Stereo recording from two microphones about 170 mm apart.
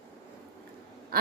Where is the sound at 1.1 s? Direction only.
60° right (ahead or behind).